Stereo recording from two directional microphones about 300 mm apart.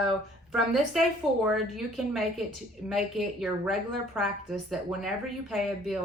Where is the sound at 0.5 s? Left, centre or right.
Centre.